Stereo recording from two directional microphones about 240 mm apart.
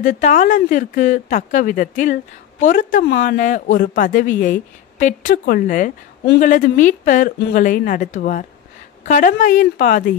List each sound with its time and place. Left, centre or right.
0.0 s speech: left